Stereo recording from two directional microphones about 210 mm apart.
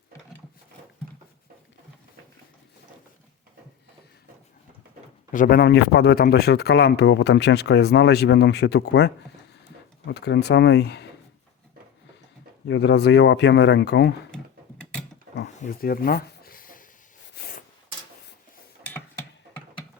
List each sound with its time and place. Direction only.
5.3 s a man's voice: 40° left (ahead or behind)
12.6 s speech: 55° left (ahead or behind)
15.4 s a sound: 45° left (ahead or behind)